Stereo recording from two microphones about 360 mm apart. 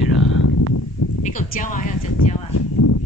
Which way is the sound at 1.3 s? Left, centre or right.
Left.